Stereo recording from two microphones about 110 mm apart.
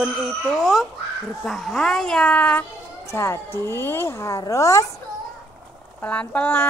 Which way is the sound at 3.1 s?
25° left (ahead or behind).